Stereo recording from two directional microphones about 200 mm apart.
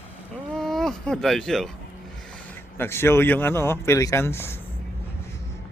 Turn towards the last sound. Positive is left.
turn(degrees=10)  # may be behind; listen again after turning